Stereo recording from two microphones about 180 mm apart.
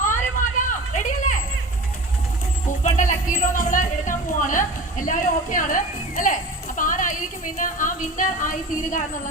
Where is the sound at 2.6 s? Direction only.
45° left (ahead or behind).